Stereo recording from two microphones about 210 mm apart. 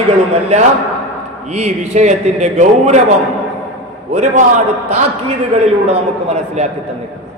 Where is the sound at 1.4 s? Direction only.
35° right (ahead or behind).